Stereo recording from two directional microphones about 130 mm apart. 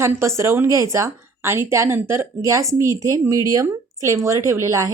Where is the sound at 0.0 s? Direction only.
20° right (ahead or behind).